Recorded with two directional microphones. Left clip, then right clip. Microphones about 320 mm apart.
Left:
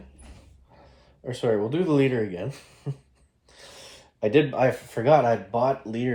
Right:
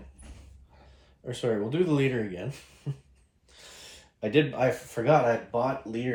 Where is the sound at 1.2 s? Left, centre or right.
Centre.